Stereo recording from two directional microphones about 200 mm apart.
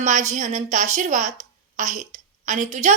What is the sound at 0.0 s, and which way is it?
A woman's voice, 35° right (ahead or behind).